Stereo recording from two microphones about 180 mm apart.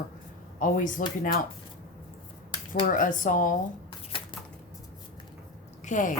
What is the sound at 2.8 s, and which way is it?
Speech, 45° left (ahead or behind).